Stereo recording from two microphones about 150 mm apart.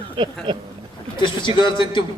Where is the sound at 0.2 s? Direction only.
35° right (ahead or behind).